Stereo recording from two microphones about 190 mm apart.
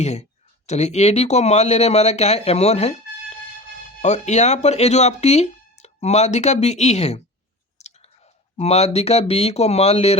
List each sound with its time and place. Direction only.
0.0 s speech: 35° left (ahead or behind)